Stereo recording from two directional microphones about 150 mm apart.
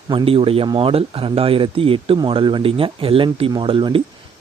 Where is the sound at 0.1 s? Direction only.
35° right (ahead or behind).